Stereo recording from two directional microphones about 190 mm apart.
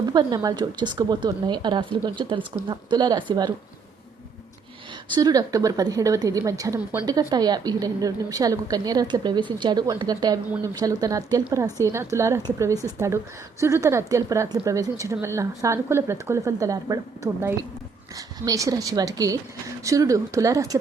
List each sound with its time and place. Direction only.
0.0 s a woman's voice: 20° right (ahead or behind)
5.1 s a woman's voice: 20° right (ahead or behind)